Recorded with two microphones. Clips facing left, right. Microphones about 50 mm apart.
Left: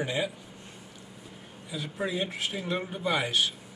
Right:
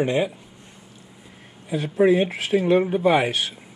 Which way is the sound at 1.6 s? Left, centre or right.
Right.